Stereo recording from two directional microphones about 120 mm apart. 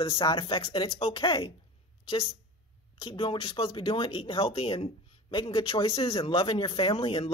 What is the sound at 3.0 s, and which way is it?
Speech, 45° left (ahead or behind).